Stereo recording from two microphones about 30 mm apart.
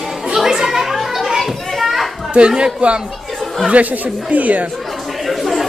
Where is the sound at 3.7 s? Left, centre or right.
Right.